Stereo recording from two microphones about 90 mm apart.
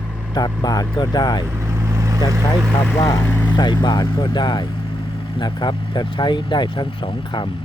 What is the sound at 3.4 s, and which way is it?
Speech, 55° left (ahead or behind).